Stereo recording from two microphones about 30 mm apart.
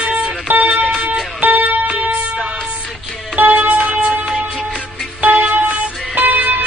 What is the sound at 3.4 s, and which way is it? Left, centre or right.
Music, right.